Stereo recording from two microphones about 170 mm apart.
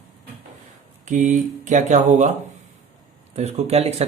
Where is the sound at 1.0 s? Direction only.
50° right (ahead or behind).